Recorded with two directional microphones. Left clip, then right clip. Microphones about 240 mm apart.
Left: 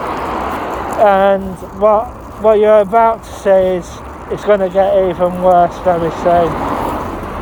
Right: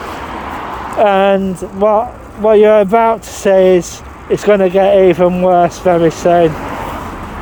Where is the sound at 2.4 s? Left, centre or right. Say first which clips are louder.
Right 1 dB; right.